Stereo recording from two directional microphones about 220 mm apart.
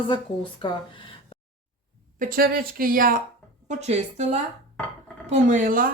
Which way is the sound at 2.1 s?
40° right (ahead or behind).